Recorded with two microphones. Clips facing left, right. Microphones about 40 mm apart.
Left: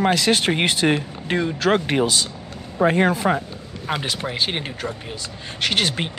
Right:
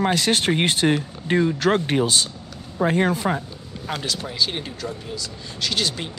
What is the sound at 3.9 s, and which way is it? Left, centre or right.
Speech, left.